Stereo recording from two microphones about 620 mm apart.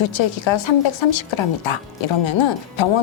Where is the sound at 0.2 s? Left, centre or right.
Left.